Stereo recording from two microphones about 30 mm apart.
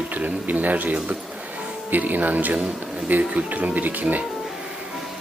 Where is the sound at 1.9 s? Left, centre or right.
Right.